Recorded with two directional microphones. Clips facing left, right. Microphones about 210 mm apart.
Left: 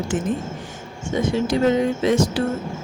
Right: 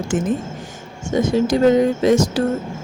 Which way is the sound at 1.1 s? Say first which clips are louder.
Right 4 dB; 45° right (ahead or behind).